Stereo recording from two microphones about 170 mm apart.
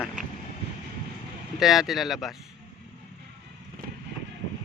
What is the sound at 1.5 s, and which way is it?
Speech, centre (ahead or behind).